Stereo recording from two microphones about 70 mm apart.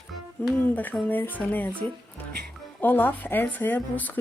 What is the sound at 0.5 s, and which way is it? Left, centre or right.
Speech, left.